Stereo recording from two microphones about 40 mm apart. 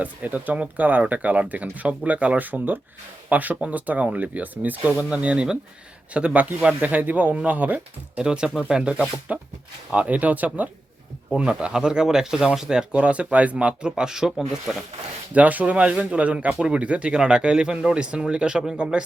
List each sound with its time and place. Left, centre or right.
0.0 s speech: right
2.4 s speech: right
8.2 s speech: right
11.3 s speech: right
13.0 s speech: right; by 14.6 s centre
15.3 s speech: right